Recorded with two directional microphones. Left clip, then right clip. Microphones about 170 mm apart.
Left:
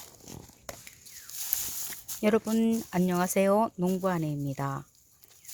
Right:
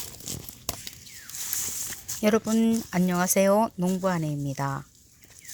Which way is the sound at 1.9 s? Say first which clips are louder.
Right 2 dB; 25° left (ahead or behind).